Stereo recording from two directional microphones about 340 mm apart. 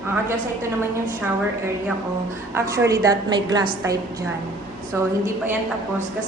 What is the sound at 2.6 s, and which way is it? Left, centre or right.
A woman's voice, centre.